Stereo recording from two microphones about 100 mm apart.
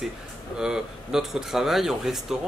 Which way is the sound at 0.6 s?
5° right (ahead or behind).